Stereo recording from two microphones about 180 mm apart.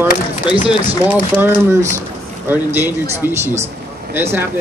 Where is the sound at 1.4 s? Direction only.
10° right (ahead or behind).